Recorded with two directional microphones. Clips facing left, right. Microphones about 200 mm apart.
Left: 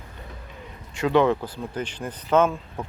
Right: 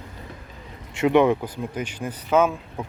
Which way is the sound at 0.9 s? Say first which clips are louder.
Right 2 dB; 20° right (ahead or behind).